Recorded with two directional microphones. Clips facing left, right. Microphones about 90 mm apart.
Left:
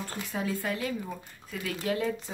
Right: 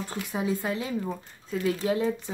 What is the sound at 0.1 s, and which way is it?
Speech, 20° right (ahead or behind).